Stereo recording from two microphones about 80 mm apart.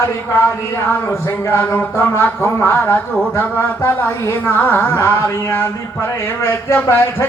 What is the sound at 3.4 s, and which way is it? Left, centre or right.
Speech, left.